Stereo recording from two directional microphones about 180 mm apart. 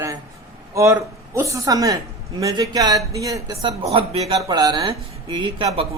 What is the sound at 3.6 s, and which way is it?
Speech, 30° right (ahead or behind).